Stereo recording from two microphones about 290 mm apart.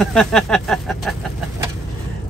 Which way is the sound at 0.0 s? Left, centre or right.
Centre.